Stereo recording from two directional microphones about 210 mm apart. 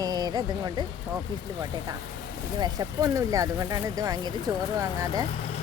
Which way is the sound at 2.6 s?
15° right (ahead or behind).